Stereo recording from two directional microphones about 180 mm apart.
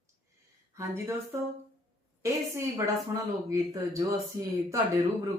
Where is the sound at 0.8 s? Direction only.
15° right (ahead or behind).